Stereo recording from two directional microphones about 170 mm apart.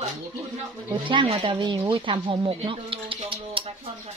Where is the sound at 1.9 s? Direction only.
30° right (ahead or behind).